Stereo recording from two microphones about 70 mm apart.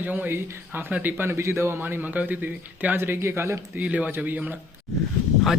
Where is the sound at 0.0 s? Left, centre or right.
Right.